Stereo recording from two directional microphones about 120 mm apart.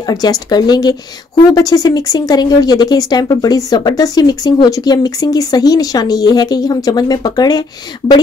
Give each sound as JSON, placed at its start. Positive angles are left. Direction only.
{"t": 0.0, "sound": "speech", "side_deg": 35}